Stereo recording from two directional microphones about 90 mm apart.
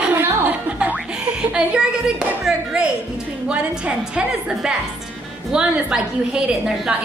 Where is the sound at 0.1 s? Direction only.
20° right (ahead or behind).